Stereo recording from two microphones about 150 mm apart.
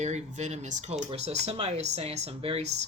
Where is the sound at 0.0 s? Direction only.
50° right (ahead or behind).